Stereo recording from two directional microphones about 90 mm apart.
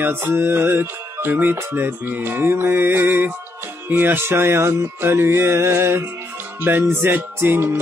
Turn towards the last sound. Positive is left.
turn(degrees=-25)  # may be behind; listen again after turning